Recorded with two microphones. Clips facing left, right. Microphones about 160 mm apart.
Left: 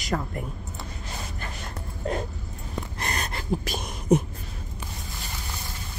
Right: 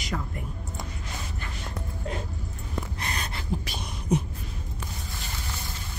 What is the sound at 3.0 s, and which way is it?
Gasp, 45° left (ahead or behind).